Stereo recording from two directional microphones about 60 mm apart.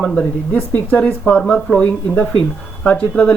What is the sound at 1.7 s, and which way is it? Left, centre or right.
Speech, centre.